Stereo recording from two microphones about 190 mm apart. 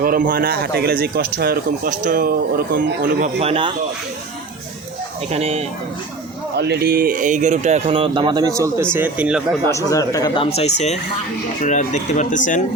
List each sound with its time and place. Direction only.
0.0 s speech: 50° right (ahead or behind)
3.4 s speech: 30° right (ahead or behind)
5.3 s speech: 35° right (ahead or behind)
6.6 s speech: 60° right (ahead or behind); by 9.4 s 5° right (ahead or behind)
9.6 s speech: 15° left (ahead or behind); by 12.6 s 40° left (ahead or behind)